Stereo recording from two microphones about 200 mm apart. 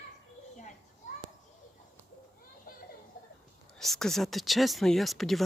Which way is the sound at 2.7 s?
45° left (ahead or behind).